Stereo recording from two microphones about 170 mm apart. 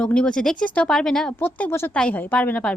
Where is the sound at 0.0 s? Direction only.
5° left (ahead or behind).